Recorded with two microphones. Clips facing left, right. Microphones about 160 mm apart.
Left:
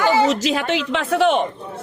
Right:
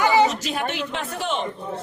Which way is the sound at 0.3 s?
90° left.